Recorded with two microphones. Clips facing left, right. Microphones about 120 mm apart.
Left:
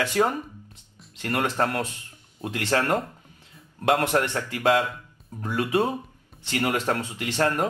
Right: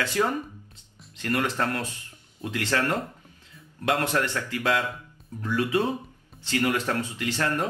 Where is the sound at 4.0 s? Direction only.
20° left (ahead or behind).